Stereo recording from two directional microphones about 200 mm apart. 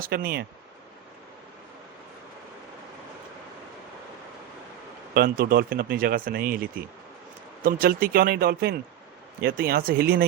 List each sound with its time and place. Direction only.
0.0 s speech: 45° right (ahead or behind)
5.1 s speech: 50° right (ahead or behind)